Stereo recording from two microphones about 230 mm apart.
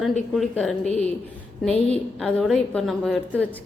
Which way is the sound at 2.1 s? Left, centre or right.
Centre.